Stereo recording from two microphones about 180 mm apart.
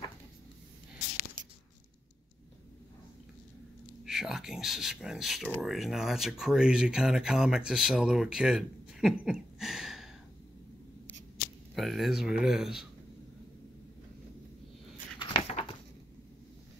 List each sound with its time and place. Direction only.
4.0 s speech: centre (ahead or behind)
11.7 s speech: centre (ahead or behind)
15.1 s a sound: 35° left (ahead or behind)